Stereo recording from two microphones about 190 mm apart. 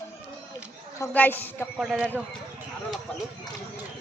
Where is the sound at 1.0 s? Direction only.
10° left (ahead or behind).